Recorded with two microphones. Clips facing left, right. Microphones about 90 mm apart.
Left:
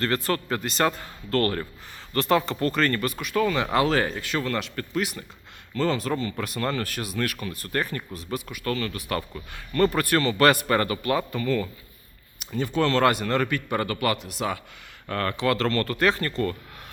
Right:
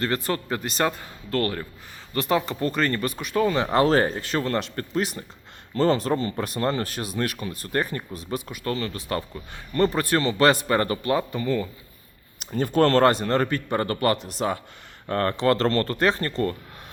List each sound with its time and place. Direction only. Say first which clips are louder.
0.0 s a man's voice: even; 20° right (ahead or behind)
12.5 s speech: right 4 dB; 45° right (ahead or behind)
13.0 s a man's voice: right 2 dB; 30° right (ahead or behind)